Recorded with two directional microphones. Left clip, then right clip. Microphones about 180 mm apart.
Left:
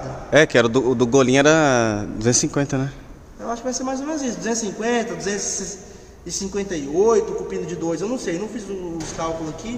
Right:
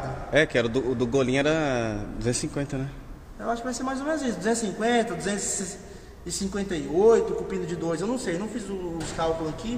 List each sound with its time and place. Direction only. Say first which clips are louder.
0.3 s a man's voice: left 8 dB; 50° left (ahead or behind)
3.4 s a man's voice: left 4 dB; 20° right (ahead or behind)
6.3 s a man's voice: left 5 dB; 20° right (ahead or behind)